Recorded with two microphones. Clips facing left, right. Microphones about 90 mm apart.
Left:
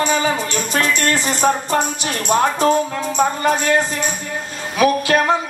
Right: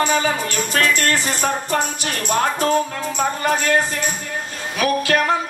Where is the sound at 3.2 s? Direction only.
20° left (ahead or behind).